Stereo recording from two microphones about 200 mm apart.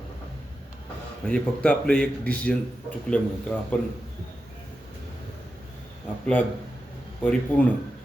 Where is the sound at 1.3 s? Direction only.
5° left (ahead or behind).